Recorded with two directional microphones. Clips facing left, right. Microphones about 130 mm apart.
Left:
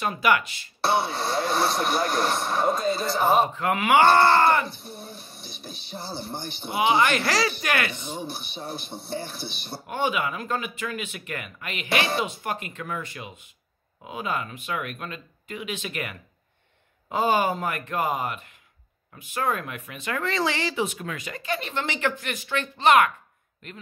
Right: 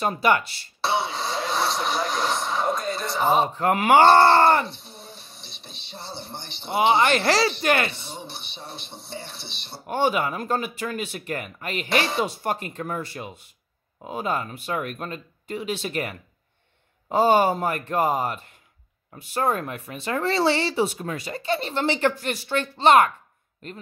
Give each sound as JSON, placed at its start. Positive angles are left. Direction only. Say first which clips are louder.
{"t": 0.0, "sound": "speech", "louder": "right 2 dB", "side_deg": -30}
{"t": 0.8, "sound": "a sound", "louder": "left 1 dB", "side_deg": 0}
{"t": 1.6, "sound": "speech", "louder": "left 1 dB", "side_deg": 5}
{"t": 3.5, "sound": "speech", "louder": "right 3 dB", "side_deg": -35}
{"t": 4.8, "sound": "a sound", "louder": "left 4 dB", "side_deg": 5}
{"t": 5.7, "sound": "speech", "louder": "left 3 dB", "side_deg": -25}